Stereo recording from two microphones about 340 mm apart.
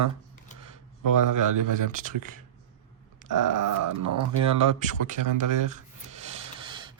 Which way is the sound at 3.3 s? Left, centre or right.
Right.